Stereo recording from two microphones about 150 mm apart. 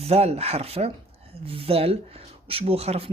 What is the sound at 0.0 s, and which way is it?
Speech, 40° right (ahead or behind).